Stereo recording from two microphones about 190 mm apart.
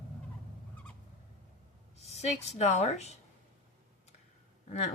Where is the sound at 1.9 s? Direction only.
35° left (ahead or behind).